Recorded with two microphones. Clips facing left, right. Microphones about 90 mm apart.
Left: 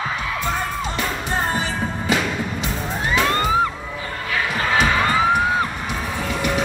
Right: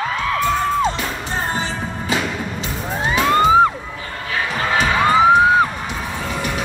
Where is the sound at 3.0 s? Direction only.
15° right (ahead or behind).